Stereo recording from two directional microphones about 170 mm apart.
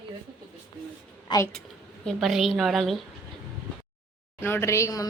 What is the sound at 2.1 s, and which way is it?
Speech, centre (ahead or behind).